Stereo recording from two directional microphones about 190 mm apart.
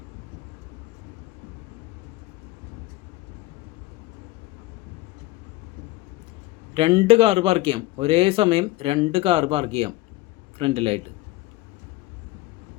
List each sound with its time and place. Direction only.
6.7 s speech: 30° right (ahead or behind)